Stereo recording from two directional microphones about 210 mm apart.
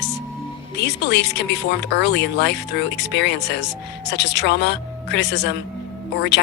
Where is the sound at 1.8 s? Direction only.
55° left (ahead or behind).